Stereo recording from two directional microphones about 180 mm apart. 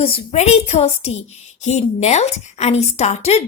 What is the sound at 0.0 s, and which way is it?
A woman's voice, 35° left (ahead or behind).